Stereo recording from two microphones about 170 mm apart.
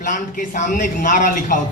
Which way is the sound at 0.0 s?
45° left (ahead or behind).